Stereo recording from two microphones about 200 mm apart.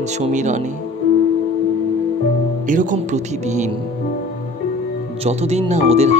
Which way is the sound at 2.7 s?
40° right (ahead or behind).